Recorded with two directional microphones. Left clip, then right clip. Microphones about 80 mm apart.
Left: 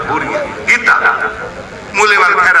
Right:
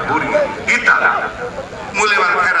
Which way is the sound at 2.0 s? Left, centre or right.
Left.